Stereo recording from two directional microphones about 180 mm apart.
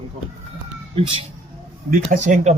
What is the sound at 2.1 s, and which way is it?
Speech, 40° right (ahead or behind).